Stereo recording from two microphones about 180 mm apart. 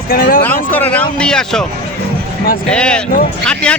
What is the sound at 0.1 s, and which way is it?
Speech, 55° left (ahead or behind).